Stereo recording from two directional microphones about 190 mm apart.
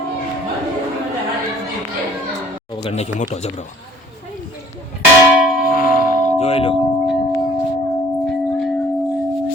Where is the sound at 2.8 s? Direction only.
35° left (ahead or behind).